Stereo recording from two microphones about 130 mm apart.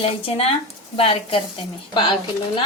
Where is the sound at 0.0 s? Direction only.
45° left (ahead or behind).